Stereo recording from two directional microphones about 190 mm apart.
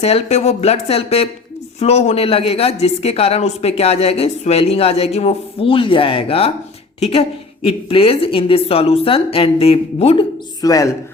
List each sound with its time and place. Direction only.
0.0 s a woman's voice: 35° left (ahead or behind)
10.6 s speech: 20° left (ahead or behind)